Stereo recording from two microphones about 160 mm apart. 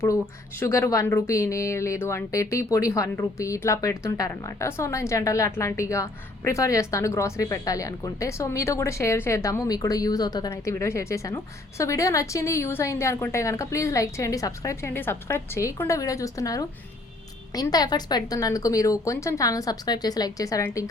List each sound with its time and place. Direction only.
0.6 s speech: 20° left (ahead or behind)